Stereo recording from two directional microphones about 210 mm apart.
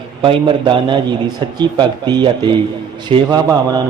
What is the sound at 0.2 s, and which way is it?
A man's voice, 25° right (ahead or behind).